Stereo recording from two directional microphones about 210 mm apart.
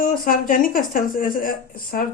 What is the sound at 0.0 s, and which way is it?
Speech, 40° left (ahead or behind).